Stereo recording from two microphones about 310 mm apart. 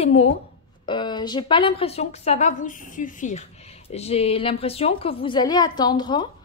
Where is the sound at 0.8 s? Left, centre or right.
Centre.